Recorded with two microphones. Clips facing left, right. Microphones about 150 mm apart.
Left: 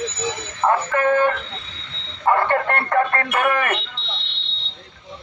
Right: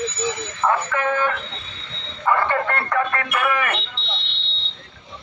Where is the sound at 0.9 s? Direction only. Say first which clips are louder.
Left 4 dB; 45° left (ahead or behind).